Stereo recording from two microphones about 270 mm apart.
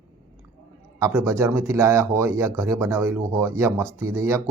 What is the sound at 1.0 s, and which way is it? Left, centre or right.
Speech, centre.